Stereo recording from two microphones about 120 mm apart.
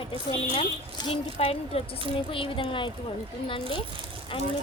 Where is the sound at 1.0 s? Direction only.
55° left (ahead or behind).